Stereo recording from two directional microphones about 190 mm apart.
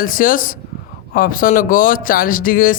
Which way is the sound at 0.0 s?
45° left (ahead or behind).